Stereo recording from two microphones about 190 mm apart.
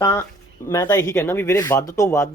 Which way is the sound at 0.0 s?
15° left (ahead or behind).